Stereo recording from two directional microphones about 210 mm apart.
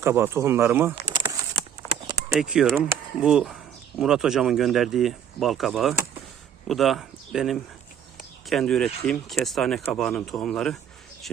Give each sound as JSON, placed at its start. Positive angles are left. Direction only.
{"t": 0.0, "sound": "speech", "side_deg": -10}
{"t": 1.0, "sound": "a sound", "side_deg": -20}
{"t": 2.3, "sound": "speech", "side_deg": 0}